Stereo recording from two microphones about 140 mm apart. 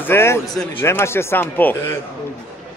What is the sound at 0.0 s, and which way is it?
Speech, 15° left (ahead or behind).